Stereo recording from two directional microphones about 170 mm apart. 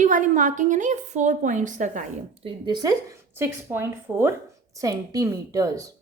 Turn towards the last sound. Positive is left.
turn(degrees=-20)  # may be behind; listen again after turning